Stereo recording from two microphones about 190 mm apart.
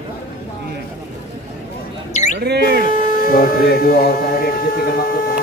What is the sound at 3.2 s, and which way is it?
Speech, 50° left (ahead or behind).